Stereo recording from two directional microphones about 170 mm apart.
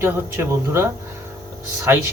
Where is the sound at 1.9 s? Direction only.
15° right (ahead or behind).